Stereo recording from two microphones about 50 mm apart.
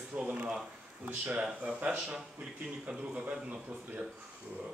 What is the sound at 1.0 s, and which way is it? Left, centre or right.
A man's voice, right.